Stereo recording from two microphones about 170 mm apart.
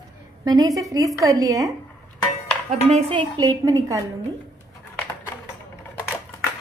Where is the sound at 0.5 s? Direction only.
20° right (ahead or behind).